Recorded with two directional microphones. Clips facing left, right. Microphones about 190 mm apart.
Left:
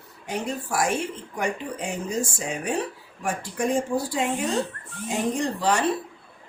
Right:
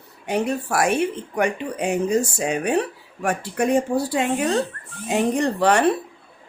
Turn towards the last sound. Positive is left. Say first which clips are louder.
# right 5 dB
turn(degrees=-65)  # may be behind; listen again after turning